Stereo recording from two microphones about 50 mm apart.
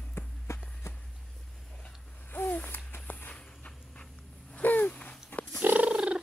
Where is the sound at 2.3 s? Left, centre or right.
Left.